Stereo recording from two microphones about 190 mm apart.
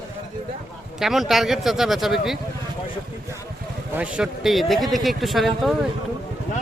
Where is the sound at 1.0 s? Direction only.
Centre (ahead or behind).